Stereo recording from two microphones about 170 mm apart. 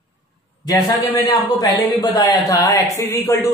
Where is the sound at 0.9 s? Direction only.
20° left (ahead or behind).